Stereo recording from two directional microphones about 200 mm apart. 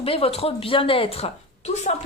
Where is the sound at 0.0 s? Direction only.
30° left (ahead or behind).